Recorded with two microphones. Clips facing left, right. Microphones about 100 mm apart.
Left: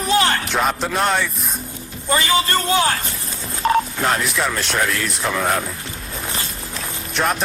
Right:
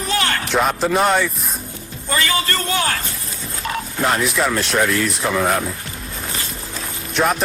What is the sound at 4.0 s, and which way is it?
Speech, centre (ahead or behind).